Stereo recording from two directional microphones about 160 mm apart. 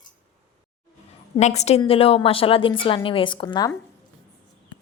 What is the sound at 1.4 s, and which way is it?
A woman's voice, 45° left (ahead or behind).